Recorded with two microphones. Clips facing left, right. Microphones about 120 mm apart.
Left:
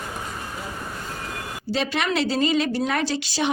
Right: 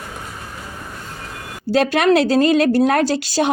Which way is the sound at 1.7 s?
50° right (ahead or behind).